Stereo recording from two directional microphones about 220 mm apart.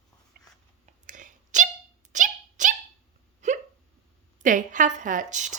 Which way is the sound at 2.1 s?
35° right (ahead or behind).